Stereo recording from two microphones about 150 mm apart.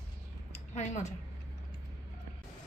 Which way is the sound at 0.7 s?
50° left (ahead or behind).